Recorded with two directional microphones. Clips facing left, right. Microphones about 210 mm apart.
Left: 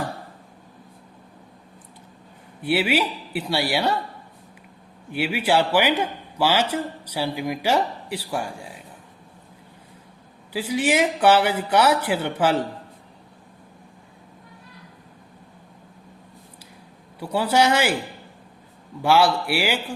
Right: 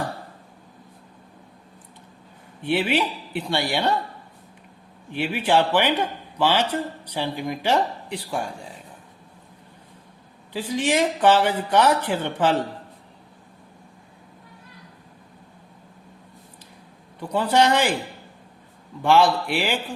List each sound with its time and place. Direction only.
2.6 s speech: 5° left (ahead or behind)
5.1 s speech: 10° left (ahead or behind)
10.5 s speech: 10° left (ahead or behind)
17.2 s speech: 10° left (ahead or behind)
19.0 s speech: 5° left (ahead or behind)